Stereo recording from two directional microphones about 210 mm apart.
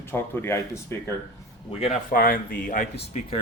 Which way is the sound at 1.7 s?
30° left (ahead or behind).